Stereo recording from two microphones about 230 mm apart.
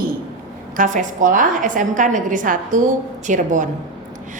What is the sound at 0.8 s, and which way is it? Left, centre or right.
A woman's voice, right.